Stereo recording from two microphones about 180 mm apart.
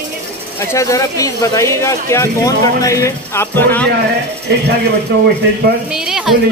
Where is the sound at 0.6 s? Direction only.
15° left (ahead or behind).